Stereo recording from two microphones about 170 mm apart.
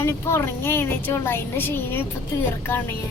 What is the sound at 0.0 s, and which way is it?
A woman's voice, 15° left (ahead or behind).